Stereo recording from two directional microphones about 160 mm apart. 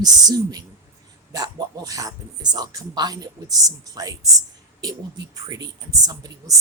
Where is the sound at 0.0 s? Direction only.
25° right (ahead or behind).